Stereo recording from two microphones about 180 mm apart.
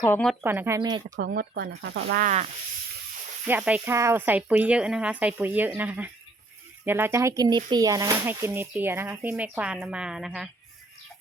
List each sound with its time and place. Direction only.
0.0 s speech: 10° left (ahead or behind)
0.4 s speech: 10° right (ahead or behind)
0.8 s speech: 25° right (ahead or behind)
1.1 s speech: 60° right (ahead or behind)
3.4 s speech: 10° right (ahead or behind)